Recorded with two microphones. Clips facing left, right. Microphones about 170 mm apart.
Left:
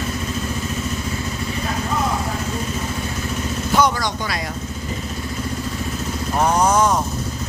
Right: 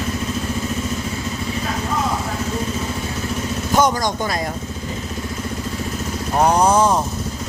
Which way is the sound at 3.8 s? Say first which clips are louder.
Right 2 dB; 45° right (ahead or behind).